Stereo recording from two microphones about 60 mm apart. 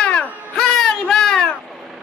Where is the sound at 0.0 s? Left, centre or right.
Centre.